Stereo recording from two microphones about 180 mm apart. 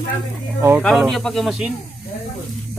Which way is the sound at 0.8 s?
Centre (ahead or behind).